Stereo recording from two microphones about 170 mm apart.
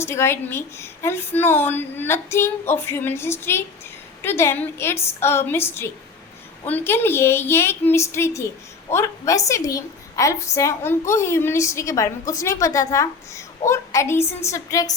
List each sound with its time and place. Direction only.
0.0 s a woman's voice: 15° left (ahead or behind)